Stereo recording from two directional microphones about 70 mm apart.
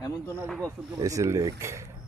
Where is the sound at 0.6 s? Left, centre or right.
Right.